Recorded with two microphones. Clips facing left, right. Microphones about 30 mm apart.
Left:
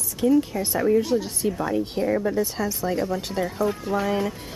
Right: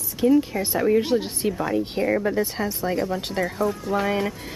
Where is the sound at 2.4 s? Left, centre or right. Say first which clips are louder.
Even; right.